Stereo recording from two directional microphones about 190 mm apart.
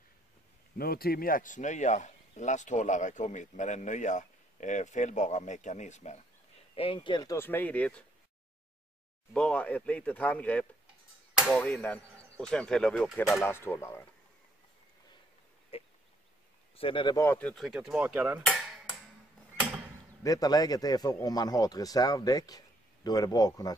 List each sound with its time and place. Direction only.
0.7 s a man's voice: 55° left (ahead or behind); by 7.3 s 25° left (ahead or behind)
7.3 s speech: 10° left (ahead or behind)
9.3 s speech: 5° left (ahead or behind)
13.5 s speech: 15° left (ahead or behind)
15.7 s a sound: 30° left (ahead or behind)
16.7 s speech: 25° left (ahead or behind)
17.2 s speech: 10° left (ahead or behind)
20.2 s a man's voice: 20° left (ahead or behind)